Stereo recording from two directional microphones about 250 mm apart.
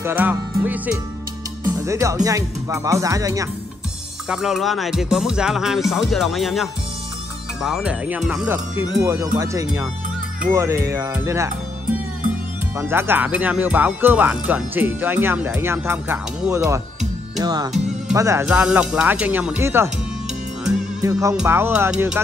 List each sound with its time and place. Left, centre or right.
0.0 s speech: centre
4.3 s music: centre
8.9 s speech: centre
12.7 s speech: centre
18.1 s music: centre
21.0 s speech: centre